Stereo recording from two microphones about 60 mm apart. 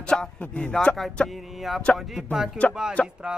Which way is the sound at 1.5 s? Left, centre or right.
Centre.